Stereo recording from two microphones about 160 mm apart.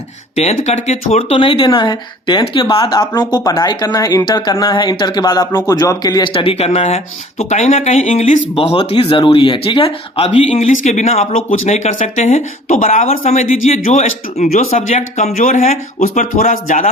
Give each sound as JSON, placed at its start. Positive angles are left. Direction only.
{"t": 0.3, "sound": "speech", "side_deg": 45}